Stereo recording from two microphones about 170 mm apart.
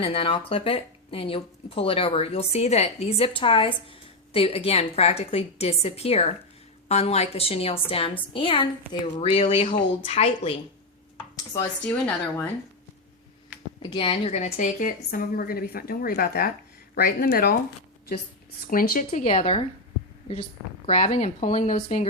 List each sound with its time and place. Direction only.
0.0 s speech: 35° left (ahead or behind)
9.3 s speech: 40° left (ahead or behind)
11.8 s speech: 5° left (ahead or behind)
13.5 s a sound: 10° right (ahead or behind)
13.9 s a woman's voice: 35° left (ahead or behind); by 17.6 s 65° left (ahead or behind)
18.7 s a woman's voice: 55° left (ahead or behind)
19.3 s speech: 35° left (ahead or behind)
20.8 s speech: 35° left (ahead or behind); by 22.0 s 50° left (ahead or behind)